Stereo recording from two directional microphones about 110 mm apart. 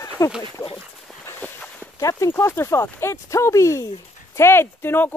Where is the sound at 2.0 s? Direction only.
30° left (ahead or behind).